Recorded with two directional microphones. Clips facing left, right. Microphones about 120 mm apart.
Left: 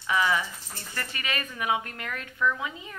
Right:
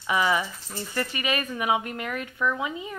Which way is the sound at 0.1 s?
15° right (ahead or behind).